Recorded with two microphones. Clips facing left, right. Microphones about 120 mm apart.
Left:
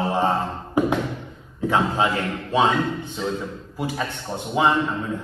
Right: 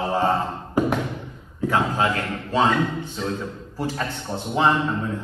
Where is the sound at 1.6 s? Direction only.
20° left (ahead or behind).